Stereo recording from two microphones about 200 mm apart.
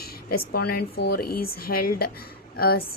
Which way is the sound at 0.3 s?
50° left (ahead or behind).